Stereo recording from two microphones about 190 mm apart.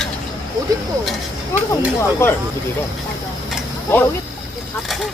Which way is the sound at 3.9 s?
10° left (ahead or behind).